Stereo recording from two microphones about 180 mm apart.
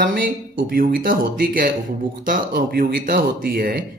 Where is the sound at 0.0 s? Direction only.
50° right (ahead or behind).